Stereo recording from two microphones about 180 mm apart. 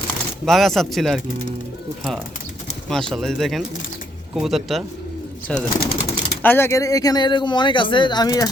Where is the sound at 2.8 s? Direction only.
Centre (ahead or behind).